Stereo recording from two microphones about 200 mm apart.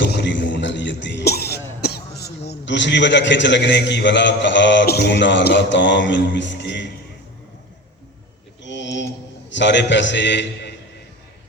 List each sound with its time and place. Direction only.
0.0 s a man's voice: 60° left (ahead or behind)
8.6 s a sound: 65° left (ahead or behind)
9.5 s a man's voice: 65° left (ahead or behind)